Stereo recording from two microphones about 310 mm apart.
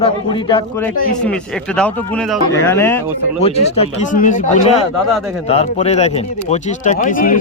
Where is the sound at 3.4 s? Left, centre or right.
Centre.